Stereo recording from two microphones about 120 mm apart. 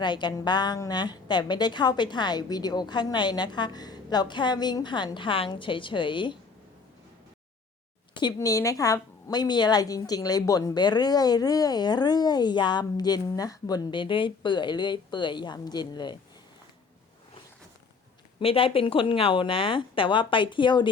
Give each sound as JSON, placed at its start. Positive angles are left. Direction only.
{"t": 0.0, "sound": "a woman's voice", "side_deg": 40}
{"t": 8.4, "sound": "a woman's voice", "side_deg": 25}
{"t": 18.3, "sound": "speech", "side_deg": 50}